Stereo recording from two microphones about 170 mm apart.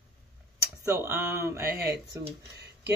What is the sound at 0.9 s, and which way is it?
Speech, 15° right (ahead or behind).